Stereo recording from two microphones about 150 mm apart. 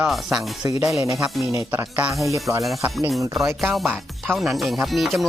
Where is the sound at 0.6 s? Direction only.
20° right (ahead or behind).